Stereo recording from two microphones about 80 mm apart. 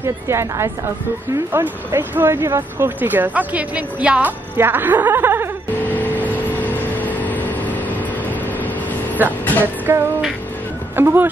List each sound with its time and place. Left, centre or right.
0.0 s a woman's voice: right; by 4.3 s centre
4.6 s speech: right
5.8 s vehicle: left
9.4 s music: left
9.9 s a woman's voice: right